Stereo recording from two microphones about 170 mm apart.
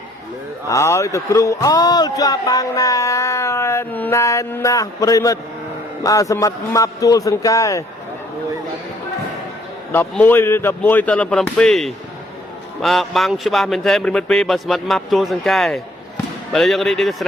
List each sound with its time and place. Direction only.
0.7 s a man's voice: 15° left (ahead or behind)
9.9 s a man's voice: 10° left (ahead or behind)